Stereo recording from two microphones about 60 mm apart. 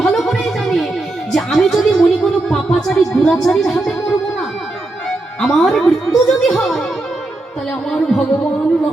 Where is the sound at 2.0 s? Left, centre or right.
Centre.